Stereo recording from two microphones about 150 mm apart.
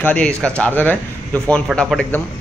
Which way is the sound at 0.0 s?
10° left (ahead or behind).